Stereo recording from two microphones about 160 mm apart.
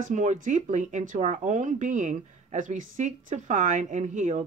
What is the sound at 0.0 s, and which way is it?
Speech, 50° right (ahead or behind).